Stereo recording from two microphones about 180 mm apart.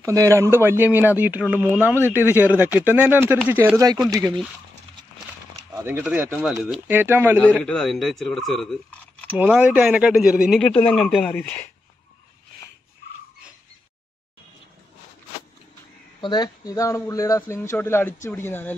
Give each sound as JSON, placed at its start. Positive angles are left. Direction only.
{"t": 0.0, "sound": "speech", "side_deg": -20}
{"t": 5.7, "sound": "speech", "side_deg": -10}
{"t": 7.3, "sound": "a man's voice", "side_deg": 10}
{"t": 16.2, "sound": "a man's voice", "side_deg": 25}